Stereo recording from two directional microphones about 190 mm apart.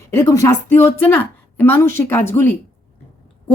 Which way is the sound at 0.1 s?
15° left (ahead or behind).